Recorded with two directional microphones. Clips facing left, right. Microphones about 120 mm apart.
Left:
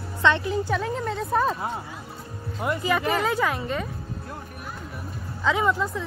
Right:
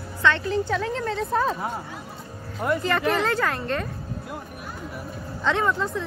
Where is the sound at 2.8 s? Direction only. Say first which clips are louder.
Left 2 dB; centre (ahead or behind).